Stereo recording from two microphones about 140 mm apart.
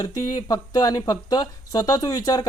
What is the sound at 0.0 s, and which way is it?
Speech, 25° left (ahead or behind).